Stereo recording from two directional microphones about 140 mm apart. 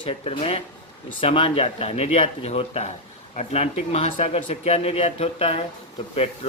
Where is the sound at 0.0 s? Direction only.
45° left (ahead or behind).